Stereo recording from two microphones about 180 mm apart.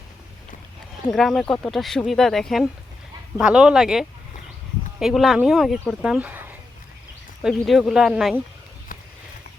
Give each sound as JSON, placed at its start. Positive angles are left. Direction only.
{"t": 1.1, "sound": "speech", "side_deg": 0}